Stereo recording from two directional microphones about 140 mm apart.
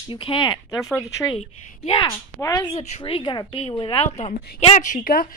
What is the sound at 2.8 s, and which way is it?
Speech, 55° left (ahead or behind).